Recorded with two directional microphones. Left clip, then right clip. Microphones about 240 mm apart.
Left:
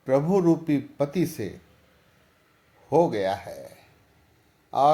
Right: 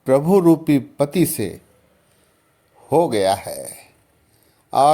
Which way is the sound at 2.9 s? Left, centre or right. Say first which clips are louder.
Right 6 dB; right.